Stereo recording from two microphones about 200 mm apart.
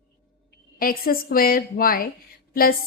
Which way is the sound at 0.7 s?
45° left (ahead or behind).